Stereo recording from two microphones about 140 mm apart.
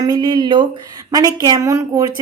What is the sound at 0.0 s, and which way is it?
A woman's voice, 30° right (ahead or behind).